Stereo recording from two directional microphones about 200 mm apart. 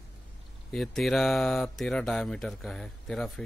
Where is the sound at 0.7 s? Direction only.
Centre (ahead or behind).